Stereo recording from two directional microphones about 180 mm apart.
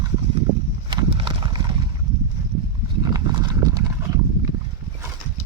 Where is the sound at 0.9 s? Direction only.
25° right (ahead or behind).